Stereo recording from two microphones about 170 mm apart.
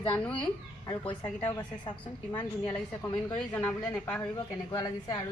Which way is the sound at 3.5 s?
10° left (ahead or behind).